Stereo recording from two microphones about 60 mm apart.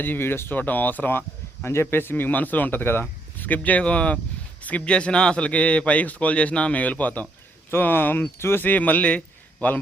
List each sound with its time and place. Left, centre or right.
0.0 s speech: left
1.6 s a man's voice: left
8.4 s speech: left
8.6 s a man's voice: left